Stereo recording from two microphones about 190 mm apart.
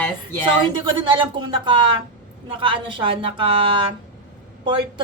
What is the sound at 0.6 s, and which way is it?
Speech, 25° right (ahead or behind).